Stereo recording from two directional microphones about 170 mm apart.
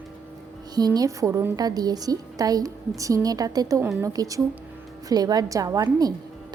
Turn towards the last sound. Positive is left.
turn(degrees=-20)  # may be behind; listen again after turning